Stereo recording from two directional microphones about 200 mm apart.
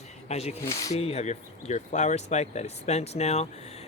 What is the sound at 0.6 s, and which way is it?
Speech, 15° left (ahead or behind).